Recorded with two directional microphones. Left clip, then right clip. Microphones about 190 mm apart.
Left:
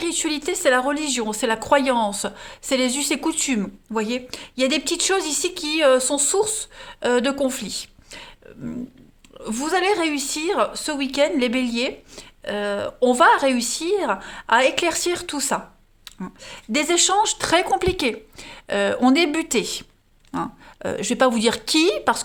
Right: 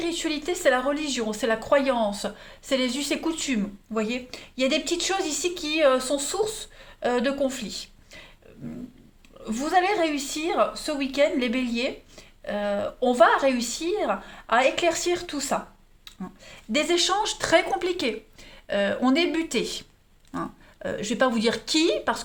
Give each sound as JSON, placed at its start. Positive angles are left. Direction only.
{"t": 0.0, "sound": "speech", "side_deg": 45}
{"t": 9.4, "sound": "speech", "side_deg": 50}